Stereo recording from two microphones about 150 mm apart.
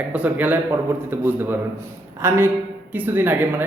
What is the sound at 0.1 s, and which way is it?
A man's voice, 10° right (ahead or behind).